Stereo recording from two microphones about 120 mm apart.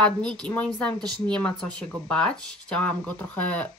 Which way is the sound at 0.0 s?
5° left (ahead or behind).